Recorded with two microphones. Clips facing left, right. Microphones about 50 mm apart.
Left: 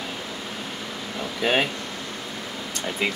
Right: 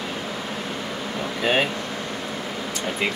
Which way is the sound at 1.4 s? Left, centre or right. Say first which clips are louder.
Right 1 dB; centre.